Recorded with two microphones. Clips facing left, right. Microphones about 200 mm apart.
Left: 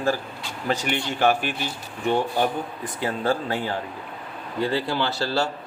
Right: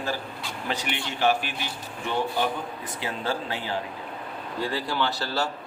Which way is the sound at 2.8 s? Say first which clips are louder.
Left 7 dB; 50° left (ahead or behind).